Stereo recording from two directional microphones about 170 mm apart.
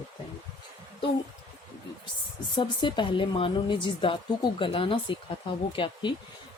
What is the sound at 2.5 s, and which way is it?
Speech, 25° left (ahead or behind).